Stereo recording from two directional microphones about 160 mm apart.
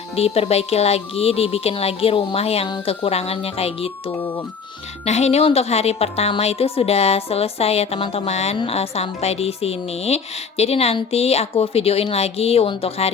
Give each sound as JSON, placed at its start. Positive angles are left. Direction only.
{"t": 0.2, "sound": "speech", "side_deg": 40}
{"t": 4.1, "sound": "speech", "side_deg": 10}
{"t": 5.0, "sound": "speech", "side_deg": 45}